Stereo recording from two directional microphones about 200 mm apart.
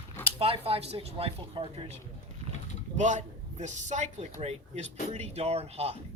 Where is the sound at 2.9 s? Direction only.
35° right (ahead or behind).